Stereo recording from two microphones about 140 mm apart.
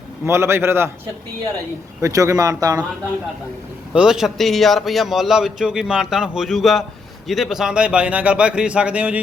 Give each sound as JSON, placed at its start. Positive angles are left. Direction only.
{"t": 0.3, "sound": "speech", "side_deg": -20}
{"t": 2.0, "sound": "speech", "side_deg": -20}
{"t": 3.9, "sound": "a man's voice", "side_deg": -5}